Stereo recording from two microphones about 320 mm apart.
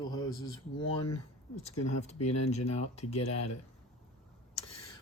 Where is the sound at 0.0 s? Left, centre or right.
Centre.